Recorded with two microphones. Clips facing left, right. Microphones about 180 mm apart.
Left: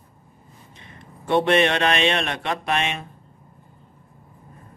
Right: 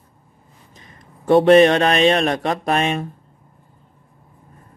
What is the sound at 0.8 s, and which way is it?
A man's voice, 40° right (ahead or behind).